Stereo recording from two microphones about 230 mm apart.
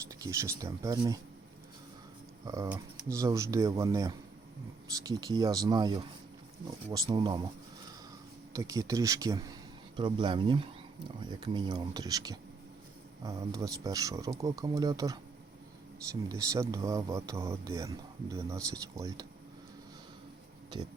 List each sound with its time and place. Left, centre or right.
0.1 s speech: centre
2.4 s speech: centre
16.3 s speech: centre